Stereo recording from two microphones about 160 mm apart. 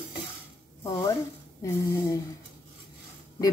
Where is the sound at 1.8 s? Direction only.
20° left (ahead or behind).